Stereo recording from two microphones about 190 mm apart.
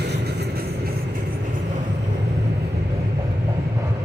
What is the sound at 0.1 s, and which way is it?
Vehicle, 60° right (ahead or behind).